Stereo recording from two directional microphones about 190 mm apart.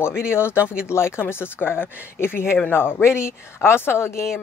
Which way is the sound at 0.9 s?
15° left (ahead or behind).